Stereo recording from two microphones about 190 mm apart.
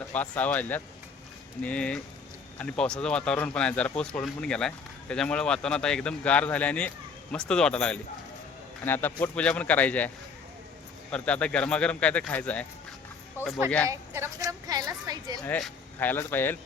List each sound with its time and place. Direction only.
0.1 s speech: 10° left (ahead or behind)
11.1 s speech: 5° left (ahead or behind)
13.4 s a woman's voice: 10° right (ahead or behind)
15.4 s speech: 5° left (ahead or behind)